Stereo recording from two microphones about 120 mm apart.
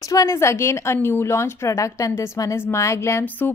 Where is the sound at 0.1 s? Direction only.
25° left (ahead or behind).